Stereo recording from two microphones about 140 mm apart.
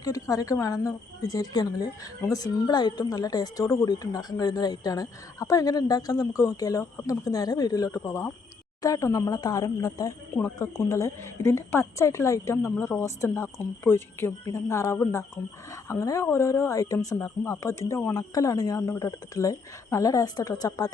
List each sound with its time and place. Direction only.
0.0 s a woman's voice: 25° left (ahead or behind)